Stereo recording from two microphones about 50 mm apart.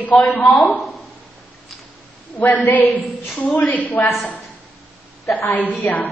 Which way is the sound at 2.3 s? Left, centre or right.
Left.